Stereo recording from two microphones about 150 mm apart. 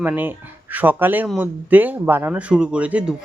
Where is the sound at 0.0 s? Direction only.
10° right (ahead or behind).